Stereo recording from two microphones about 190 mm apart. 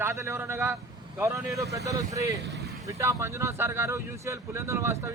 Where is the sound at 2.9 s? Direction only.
15° right (ahead or behind).